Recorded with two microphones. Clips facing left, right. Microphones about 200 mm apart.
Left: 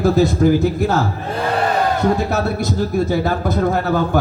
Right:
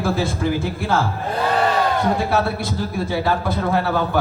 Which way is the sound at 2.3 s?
45° left (ahead or behind).